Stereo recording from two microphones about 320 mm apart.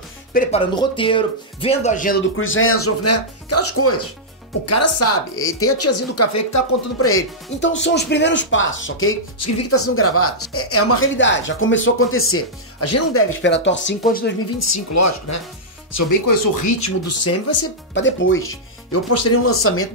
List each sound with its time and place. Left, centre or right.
0.3 s speech: left
2.3 s speech: left
7.6 s speech: left
14.6 s speech: left
15.9 s speech: left
17.9 s speech: left